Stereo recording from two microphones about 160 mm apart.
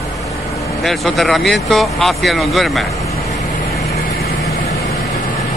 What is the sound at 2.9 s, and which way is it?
Vehicle, 20° left (ahead or behind).